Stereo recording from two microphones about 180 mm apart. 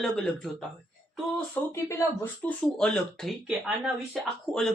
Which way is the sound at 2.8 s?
5° left (ahead or behind).